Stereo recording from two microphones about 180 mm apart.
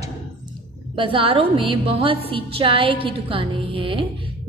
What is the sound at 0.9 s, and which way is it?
A woman's voice, 30° right (ahead or behind).